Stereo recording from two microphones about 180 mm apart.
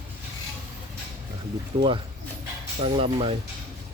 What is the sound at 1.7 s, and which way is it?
Speech, 30° right (ahead or behind).